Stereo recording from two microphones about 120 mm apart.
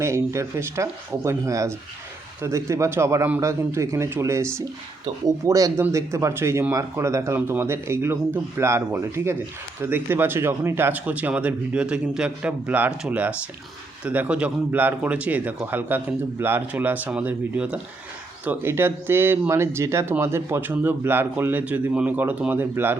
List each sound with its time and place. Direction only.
0.0 s speech: 25° right (ahead or behind)